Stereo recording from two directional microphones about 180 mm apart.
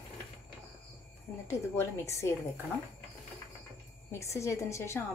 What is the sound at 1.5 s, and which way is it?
Speech, 15° left (ahead or behind).